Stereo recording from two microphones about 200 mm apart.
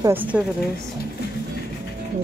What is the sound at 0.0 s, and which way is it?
Speech, 10° right (ahead or behind).